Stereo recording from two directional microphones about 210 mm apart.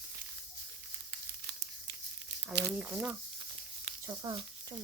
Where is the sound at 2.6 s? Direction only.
10° right (ahead or behind).